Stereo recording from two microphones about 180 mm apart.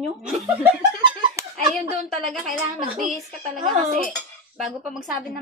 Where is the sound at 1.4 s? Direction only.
15° right (ahead or behind).